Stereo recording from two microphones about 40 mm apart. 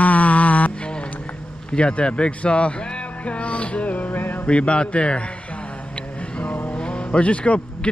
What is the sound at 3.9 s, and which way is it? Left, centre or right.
Music, left.